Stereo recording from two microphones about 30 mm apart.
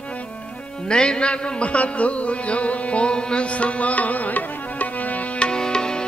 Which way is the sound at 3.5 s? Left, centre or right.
Left.